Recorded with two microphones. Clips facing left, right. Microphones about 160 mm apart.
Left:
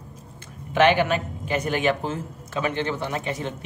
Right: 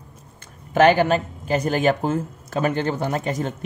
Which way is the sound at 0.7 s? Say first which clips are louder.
Right 3 dB; 40° right (ahead or behind).